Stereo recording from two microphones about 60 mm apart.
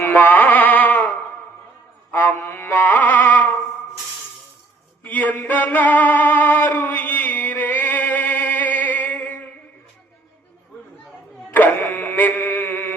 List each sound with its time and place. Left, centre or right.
0.0 s music: left
5.0 s music: left
11.5 s music: left